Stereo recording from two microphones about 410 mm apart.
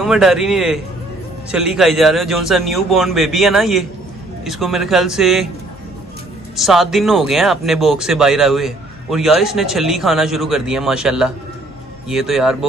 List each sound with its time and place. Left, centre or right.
0.0 s speech: centre
6.5 s speech: centre